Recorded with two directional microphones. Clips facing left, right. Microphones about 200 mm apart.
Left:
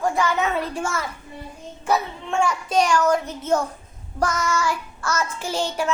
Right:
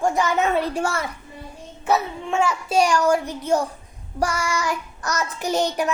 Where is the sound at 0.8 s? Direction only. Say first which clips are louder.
Right 2 dB; 35° right (ahead or behind).